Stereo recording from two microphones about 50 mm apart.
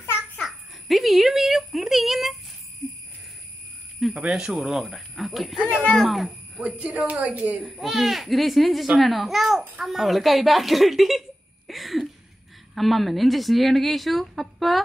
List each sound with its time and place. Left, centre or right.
0.4 s a sound: centre
4.3 s a child's voice: centre
6.6 s a woman's voice: right
7.6 s a child's voice: centre